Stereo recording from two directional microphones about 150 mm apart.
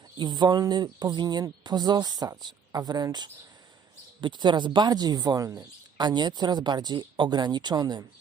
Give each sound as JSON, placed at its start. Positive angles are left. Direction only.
{"t": 0.2, "sound": "speech", "side_deg": -30}